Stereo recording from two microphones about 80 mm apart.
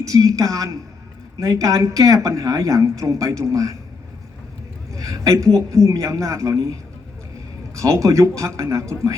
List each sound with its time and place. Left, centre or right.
0.0 s speech: right
4.9 s a woman's voice: right
7.8 s speech: right